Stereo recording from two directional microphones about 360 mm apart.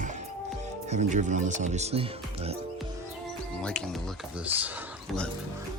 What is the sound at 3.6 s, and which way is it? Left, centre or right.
Speech, centre.